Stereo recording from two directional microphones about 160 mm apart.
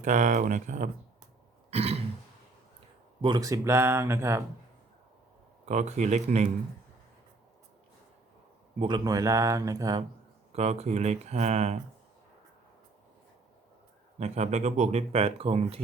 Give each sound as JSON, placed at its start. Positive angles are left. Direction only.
{"t": 0.0, "sound": "speech", "side_deg": -50}
{"t": 1.7, "sound": "throat clearing", "side_deg": -40}
{"t": 3.2, "sound": "speech", "side_deg": -25}
{"t": 5.6, "sound": "speech", "side_deg": -45}
{"t": 8.8, "sound": "speech", "side_deg": -25}
{"t": 10.5, "sound": "speech", "side_deg": -40}
{"t": 14.2, "sound": "speech", "side_deg": -45}